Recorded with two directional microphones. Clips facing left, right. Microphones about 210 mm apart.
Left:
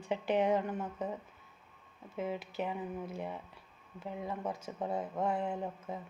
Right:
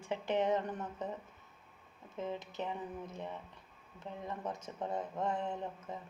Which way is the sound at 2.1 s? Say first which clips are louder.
Left 3 dB; 10° left (ahead or behind).